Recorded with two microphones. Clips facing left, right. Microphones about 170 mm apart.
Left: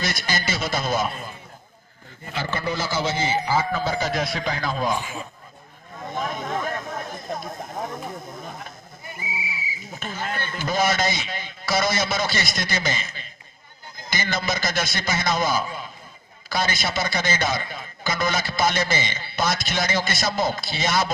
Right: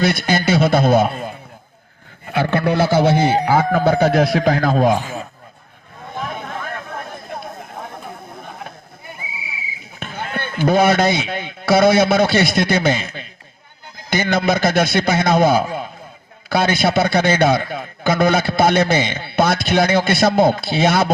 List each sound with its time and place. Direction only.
0.0 s a man's voice: 60° right (ahead or behind)
6.3 s chatter: 60° right (ahead or behind)
8.4 s a sound: 60° right (ahead or behind)
10.0 s a man's voice: 60° right (ahead or behind)